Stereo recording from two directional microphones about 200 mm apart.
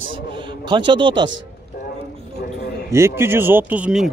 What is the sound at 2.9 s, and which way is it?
Speech, 10° right (ahead or behind).